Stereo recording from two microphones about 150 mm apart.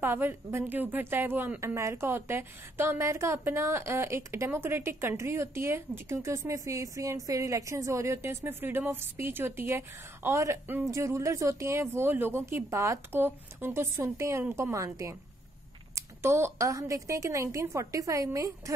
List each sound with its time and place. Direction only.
0.0 s a woman's voice: 15° right (ahead or behind)